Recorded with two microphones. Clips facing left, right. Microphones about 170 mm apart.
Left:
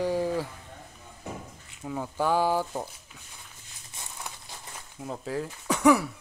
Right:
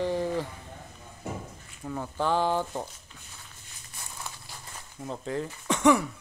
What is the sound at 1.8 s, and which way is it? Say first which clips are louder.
Speech: left 1 dB; 5° left (ahead or behind).